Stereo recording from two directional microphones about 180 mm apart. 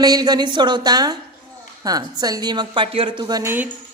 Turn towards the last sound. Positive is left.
turn(degrees=-15)  # may be behind; listen again after turning